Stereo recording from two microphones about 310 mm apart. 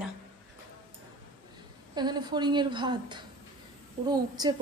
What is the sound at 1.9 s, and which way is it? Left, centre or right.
A woman's voice, centre.